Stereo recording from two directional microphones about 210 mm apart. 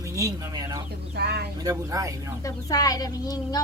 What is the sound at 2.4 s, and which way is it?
Speech, 15° left (ahead or behind).